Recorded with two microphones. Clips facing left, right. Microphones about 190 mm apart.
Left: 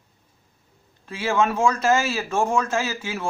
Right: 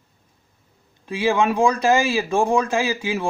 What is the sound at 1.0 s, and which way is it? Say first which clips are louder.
Speech: right 3 dB; 15° right (ahead or behind).